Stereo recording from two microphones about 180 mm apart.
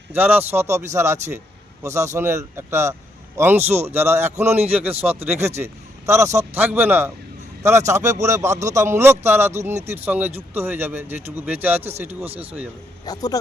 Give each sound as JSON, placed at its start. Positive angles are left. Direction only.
{"t": 0.1, "sound": "a man's voice", "side_deg": -10}
{"t": 11.8, "sound": "speech", "side_deg": -35}
{"t": 12.4, "sound": "a man's voice", "side_deg": -10}
{"t": 13.1, "sound": "speech", "side_deg": 20}